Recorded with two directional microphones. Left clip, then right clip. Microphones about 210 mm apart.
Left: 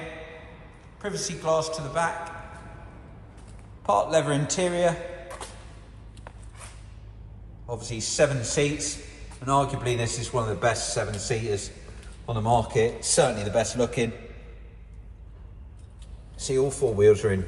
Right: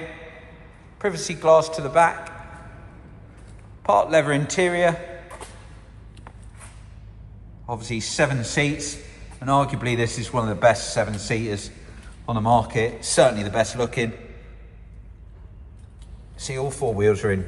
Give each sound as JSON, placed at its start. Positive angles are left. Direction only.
{"t": 0.9, "sound": "a man's voice", "side_deg": 15}
{"t": 3.8, "sound": "a man's voice", "side_deg": 20}
{"t": 7.6, "sound": "a man's voice", "side_deg": 20}
{"t": 16.3, "sound": "a man's voice", "side_deg": 20}